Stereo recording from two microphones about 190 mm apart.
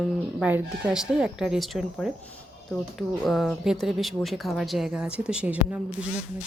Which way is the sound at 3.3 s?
Centre (ahead or behind).